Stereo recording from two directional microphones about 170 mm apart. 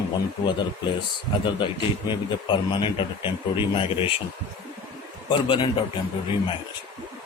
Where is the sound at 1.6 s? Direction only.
30° left (ahead or behind).